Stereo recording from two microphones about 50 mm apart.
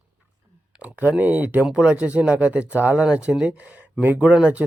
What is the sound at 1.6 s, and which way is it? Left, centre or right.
Speech, centre.